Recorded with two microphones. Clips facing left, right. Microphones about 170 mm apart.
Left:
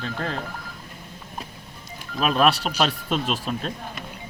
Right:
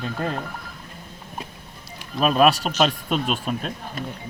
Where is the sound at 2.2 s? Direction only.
Centre (ahead or behind).